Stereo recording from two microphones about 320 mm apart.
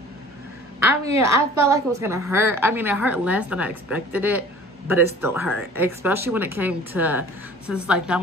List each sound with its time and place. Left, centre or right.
0.8 s a woman's voice: centre